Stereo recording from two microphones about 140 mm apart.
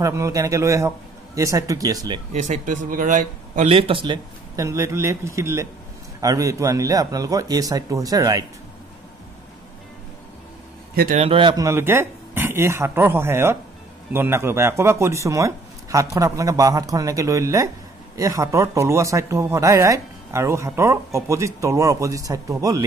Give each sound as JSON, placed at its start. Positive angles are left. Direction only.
{"t": 0.0, "sound": "speech", "side_deg": -20}
{"t": 2.3, "sound": "speech", "side_deg": -60}
{"t": 3.6, "sound": "speech", "side_deg": -40}
{"t": 4.6, "sound": "speech", "side_deg": -20}
{"t": 11.1, "sound": "speech", "side_deg": -40}
{"t": 11.6, "sound": "speech", "side_deg": -15}